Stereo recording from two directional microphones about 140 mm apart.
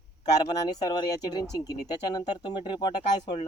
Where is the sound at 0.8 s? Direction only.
30° left (ahead or behind).